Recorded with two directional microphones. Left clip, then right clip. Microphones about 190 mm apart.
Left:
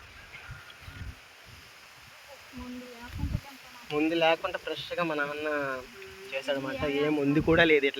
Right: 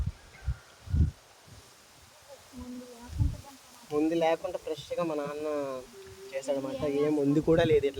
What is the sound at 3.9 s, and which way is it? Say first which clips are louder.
A man's voice: left 2 dB; centre (ahead or behind).